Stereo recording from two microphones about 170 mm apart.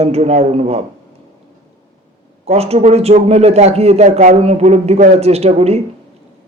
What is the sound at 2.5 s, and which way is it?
A man's voice, 35° right (ahead or behind).